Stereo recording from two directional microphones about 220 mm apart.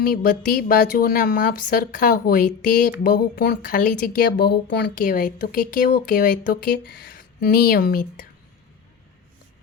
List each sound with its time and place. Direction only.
0.0 s speech: 40° left (ahead or behind)